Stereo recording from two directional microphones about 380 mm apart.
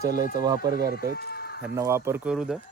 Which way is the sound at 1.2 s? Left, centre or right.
Left.